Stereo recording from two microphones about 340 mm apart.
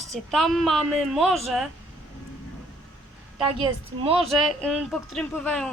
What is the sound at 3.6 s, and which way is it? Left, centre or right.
Speech, centre.